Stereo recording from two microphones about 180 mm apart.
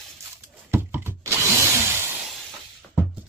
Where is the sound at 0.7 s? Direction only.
15° right (ahead or behind).